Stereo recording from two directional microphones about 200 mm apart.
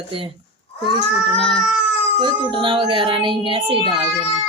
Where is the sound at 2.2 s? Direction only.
25° right (ahead or behind).